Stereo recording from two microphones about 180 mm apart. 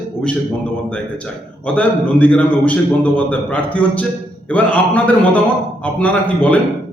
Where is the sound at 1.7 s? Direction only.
5° left (ahead or behind).